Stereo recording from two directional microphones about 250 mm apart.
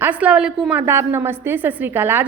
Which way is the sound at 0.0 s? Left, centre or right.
Centre.